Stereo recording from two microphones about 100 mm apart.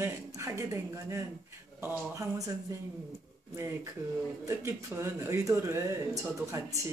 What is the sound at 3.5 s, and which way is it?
Speech, 30° right (ahead or behind).